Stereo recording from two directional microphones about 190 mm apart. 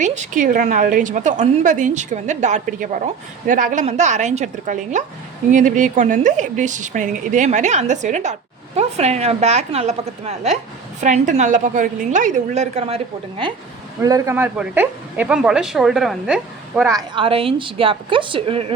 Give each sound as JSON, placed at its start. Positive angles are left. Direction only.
{"t": 0.0, "sound": "a woman's voice", "side_deg": -40}
{"t": 14.0, "sound": "a woman's voice", "side_deg": -15}
{"t": 16.9, "sound": "a woman's voice", "side_deg": -25}